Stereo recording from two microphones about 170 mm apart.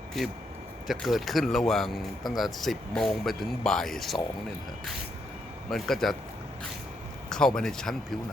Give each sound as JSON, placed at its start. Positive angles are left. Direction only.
{"t": 0.1, "sound": "speech", "side_deg": 0}
{"t": 5.7, "sound": "speech", "side_deg": 0}
{"t": 7.3, "sound": "speech", "side_deg": 5}